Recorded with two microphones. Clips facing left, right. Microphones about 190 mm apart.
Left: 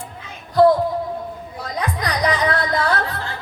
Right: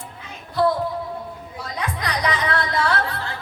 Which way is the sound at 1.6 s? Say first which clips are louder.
Left 3 dB; 40° left (ahead or behind).